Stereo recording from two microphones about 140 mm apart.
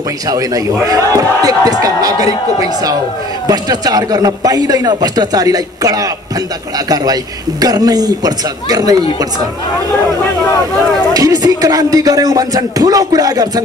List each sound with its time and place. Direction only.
0.8 s a man's voice: 25° right (ahead or behind)
7.6 s a man's voice: 25° right (ahead or behind)
11.1 s a man's voice: 25° right (ahead or behind)